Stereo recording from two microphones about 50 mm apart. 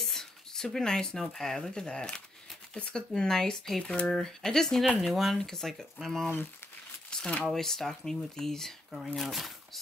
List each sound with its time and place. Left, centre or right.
0.0 s speech: centre
3.8 s speech: centre
7.1 s a sound: centre
7.4 s speech: centre